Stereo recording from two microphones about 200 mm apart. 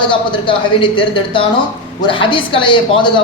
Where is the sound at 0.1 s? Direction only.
25° left (ahead or behind).